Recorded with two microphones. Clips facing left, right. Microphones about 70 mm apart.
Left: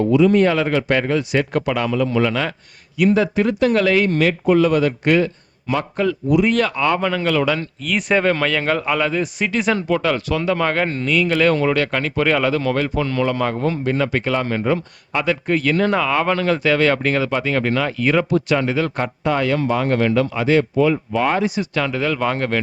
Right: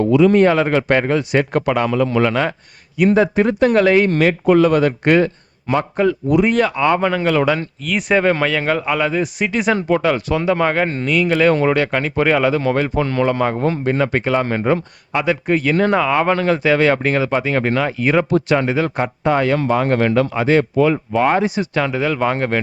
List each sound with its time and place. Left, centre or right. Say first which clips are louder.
0.1 s a man's voice: right 2 dB; right
0.3 s speech: right 3 dB; right
1.9 s a man's voice: right 2 dB; right
3.2 s speech: right 3 dB; right
4.4 s speech: right 3 dB; right
6.4 s speech: right 4 dB; centre
7.9 s speech: right 2 dB; centre
11.5 s speech: right 2 dB; right
13.4 s speech: right 2 dB; right
15.1 s speech: right 2 dB; centre
18.3 s speech: right 2 dB; right
18.5 s speech: right 2 dB; right
19.5 s speech: right 2 dB; right
21.8 s speech: right 2 dB; centre